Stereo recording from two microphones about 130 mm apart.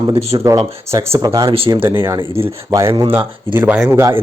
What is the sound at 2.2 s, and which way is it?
Speech, 45° right (ahead or behind).